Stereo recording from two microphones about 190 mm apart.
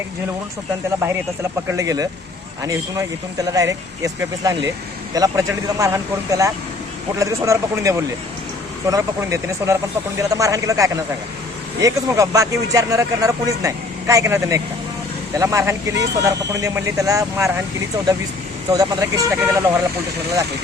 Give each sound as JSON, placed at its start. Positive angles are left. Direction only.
{"t": 1.6, "sound": "speech", "side_deg": -15}
{"t": 18.7, "sound": "speech", "side_deg": -20}